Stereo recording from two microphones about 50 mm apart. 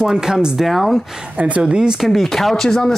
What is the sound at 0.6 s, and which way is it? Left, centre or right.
Speech, centre.